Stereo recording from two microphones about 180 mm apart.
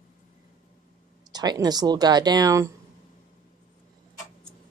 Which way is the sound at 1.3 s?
20° right (ahead or behind).